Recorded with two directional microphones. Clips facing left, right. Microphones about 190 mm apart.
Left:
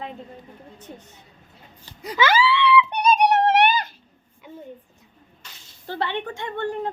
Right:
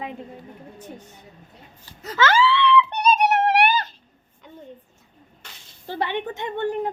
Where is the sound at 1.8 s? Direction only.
15° left (ahead or behind).